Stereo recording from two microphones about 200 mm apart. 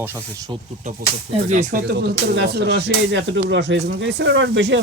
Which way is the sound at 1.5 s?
40° right (ahead or behind).